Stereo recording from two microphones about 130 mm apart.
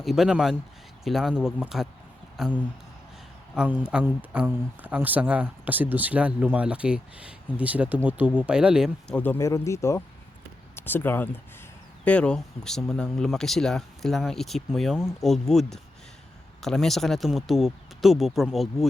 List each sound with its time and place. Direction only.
0.0 s speech: centre (ahead or behind)
9.0 s speech: 15° left (ahead or behind)